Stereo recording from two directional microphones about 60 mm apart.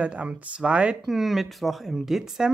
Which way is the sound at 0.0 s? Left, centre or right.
Centre.